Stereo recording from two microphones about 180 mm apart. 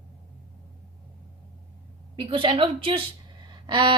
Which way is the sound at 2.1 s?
30° right (ahead or behind).